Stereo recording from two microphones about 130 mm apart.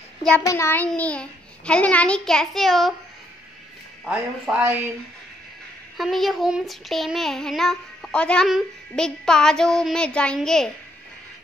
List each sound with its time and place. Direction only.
0.5 s a child's voice: 20° left (ahead or behind)
0.8 s a child's voice: 10° left (ahead or behind)
4.0 s speech: 10° right (ahead or behind)
5.9 s child singing: centre (ahead or behind)